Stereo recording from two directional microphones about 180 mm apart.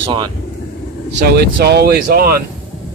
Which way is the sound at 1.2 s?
60° right (ahead or behind).